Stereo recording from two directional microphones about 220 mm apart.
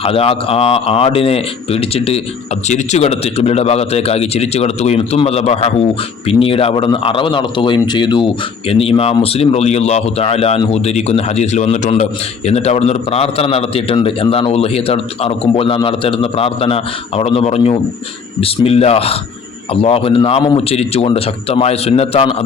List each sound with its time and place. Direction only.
0.0 s a man's voice: 25° left (ahead or behind)